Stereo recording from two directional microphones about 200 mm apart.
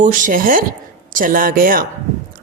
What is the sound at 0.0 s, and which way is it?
Speech, 40° right (ahead or behind).